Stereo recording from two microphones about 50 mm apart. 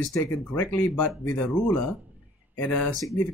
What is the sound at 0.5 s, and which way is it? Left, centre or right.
Speech, left.